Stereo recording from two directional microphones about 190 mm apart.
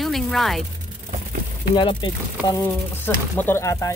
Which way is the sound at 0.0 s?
Centre (ahead or behind).